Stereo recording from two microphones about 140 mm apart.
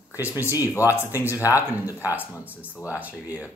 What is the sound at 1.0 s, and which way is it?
Speech, 15° right (ahead or behind).